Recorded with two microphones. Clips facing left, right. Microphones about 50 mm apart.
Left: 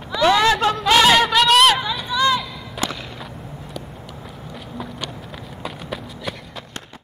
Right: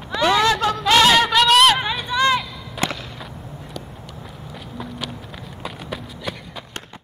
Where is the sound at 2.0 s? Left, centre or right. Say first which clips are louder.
Even; right.